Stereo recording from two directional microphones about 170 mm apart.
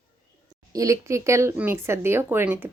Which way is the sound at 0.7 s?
20° right (ahead or behind).